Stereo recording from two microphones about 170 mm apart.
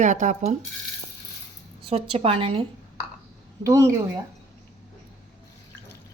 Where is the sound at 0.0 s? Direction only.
45° right (ahead or behind).